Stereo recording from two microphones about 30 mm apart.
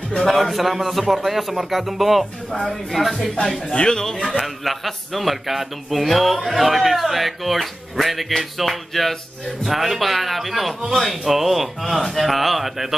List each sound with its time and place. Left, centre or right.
0.3 s speech: centre
3.7 s speech: left
4.4 s speech: centre